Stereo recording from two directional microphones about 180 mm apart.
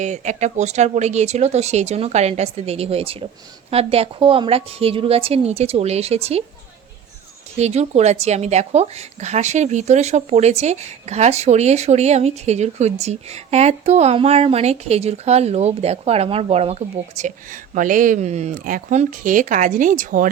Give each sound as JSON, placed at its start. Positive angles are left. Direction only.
{"t": 0.0, "sound": "a woman's voice", "side_deg": -40}
{"t": 7.6, "sound": "a woman's voice", "side_deg": -35}
{"t": 17.2, "sound": "speech", "side_deg": -45}